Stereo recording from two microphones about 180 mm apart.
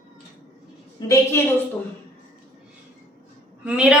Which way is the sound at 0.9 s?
20° left (ahead or behind).